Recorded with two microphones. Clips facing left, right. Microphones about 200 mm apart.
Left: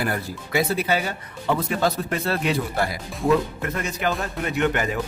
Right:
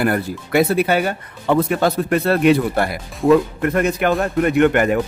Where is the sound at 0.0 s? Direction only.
60° right (ahead or behind).